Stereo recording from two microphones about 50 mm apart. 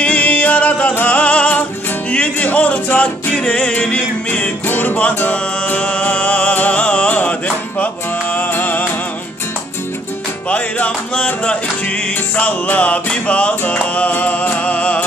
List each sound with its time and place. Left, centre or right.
0.0 s music: left
4.6 s music: left
10.5 s music: left